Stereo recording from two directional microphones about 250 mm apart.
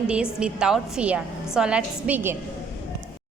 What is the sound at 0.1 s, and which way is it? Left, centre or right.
A woman's voice, centre.